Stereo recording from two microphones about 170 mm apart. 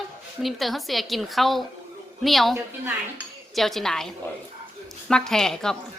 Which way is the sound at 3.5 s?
Centre (ahead or behind).